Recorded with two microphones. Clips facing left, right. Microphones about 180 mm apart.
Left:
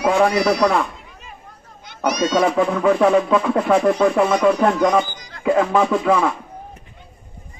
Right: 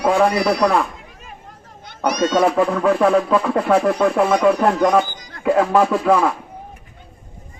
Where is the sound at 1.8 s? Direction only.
55° right (ahead or behind).